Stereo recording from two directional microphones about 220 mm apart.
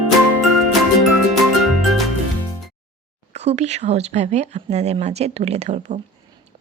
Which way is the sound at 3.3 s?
30° right (ahead or behind).